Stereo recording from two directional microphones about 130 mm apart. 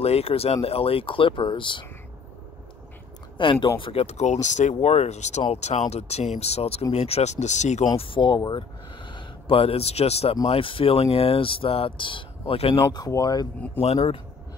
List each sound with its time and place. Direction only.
0.0 s speech: 50° left (ahead or behind)
3.3 s speech: 40° left (ahead or behind)
3.8 s speech: 50° left (ahead or behind)
8.0 s speech: 40° left (ahead or behind)
12.9 s speech: 30° left (ahead or behind)